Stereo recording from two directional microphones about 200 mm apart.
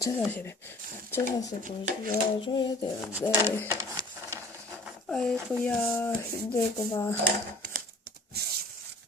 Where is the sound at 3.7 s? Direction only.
15° right (ahead or behind).